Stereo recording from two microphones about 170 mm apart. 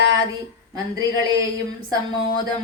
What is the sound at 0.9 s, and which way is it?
Speech, 20° right (ahead or behind).